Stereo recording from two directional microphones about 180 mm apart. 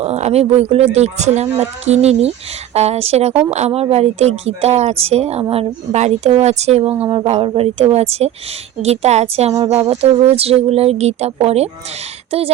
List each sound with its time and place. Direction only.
0.0 s speech: 35° right (ahead or behind)